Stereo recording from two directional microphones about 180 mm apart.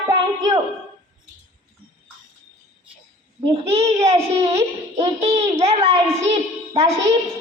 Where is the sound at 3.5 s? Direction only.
35° right (ahead or behind).